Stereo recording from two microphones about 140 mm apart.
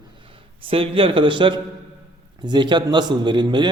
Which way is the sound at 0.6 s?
40° right (ahead or behind).